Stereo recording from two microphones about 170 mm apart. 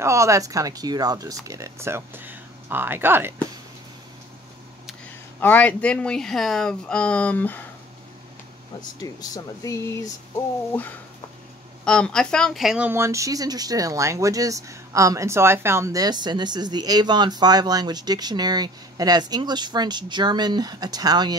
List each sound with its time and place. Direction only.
0.0 s speech: 15° right (ahead or behind)
5.4 s speech: 10° left (ahead or behind)
9.0 s speech: 20° left (ahead or behind)
11.8 s speech: 5° left (ahead or behind); by 21.4 s 25° right (ahead or behind)